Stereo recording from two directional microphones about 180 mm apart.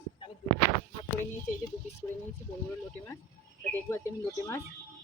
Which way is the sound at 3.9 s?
15° left (ahead or behind).